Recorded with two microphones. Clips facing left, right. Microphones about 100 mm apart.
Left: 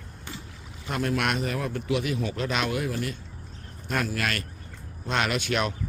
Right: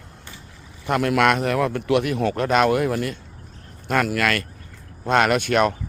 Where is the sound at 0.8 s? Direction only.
65° right (ahead or behind).